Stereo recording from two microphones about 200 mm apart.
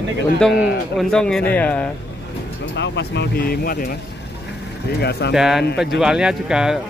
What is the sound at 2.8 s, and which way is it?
Speech, 60° left (ahead or behind).